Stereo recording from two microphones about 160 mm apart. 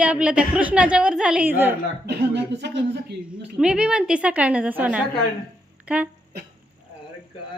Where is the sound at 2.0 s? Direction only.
90° right.